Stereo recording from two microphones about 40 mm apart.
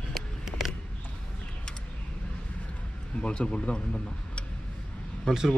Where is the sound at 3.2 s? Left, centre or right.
Left.